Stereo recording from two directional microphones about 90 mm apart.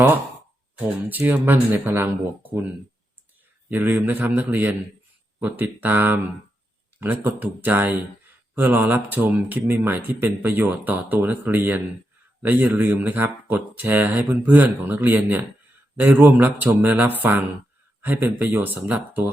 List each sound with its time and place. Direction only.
1.0 s speech: 15° right (ahead or behind)
3.7 s speech: 20° right (ahead or behind)